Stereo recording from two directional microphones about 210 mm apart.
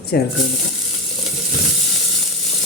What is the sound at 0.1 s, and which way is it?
Speech, 50° left (ahead or behind).